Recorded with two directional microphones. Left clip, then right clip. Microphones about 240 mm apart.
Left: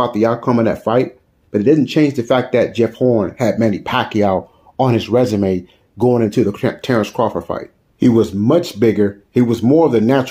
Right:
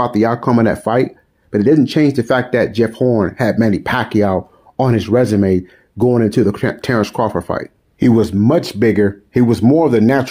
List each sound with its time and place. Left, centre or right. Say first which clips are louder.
0.2 s speech: right 2 dB; right
5.3 s speech: right 3 dB; right
5.9 s speech: right 1 dB; right